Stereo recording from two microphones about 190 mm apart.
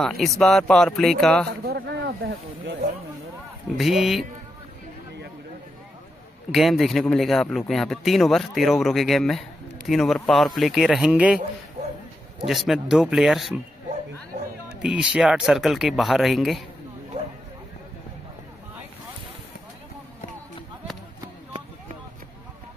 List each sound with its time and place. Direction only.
0.0 s speech: centre (ahead or behind)
1.6 s speech: 60° right (ahead or behind)
3.7 s speech: centre (ahead or behind)
6.5 s speech: centre (ahead or behind)
12.4 s speech: centre (ahead or behind)
14.7 s speech: 5° right (ahead or behind)